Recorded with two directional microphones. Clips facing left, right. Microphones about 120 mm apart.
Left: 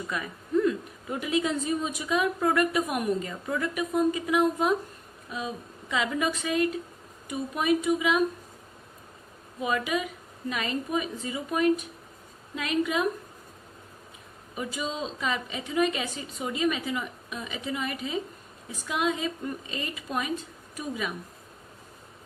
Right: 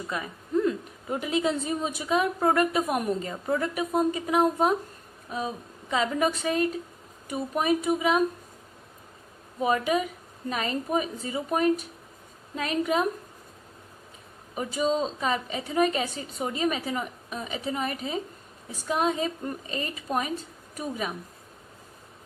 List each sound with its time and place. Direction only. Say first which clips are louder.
0.1 s a sound: even; 30° right (ahead or behind)
1.1 s a woman's voice: right 1 dB; 30° right (ahead or behind)
9.6 s a woman's voice: right 4 dB; 35° right (ahead or behind)
14.5 s a woman's voice: right 7 dB; 40° right (ahead or behind)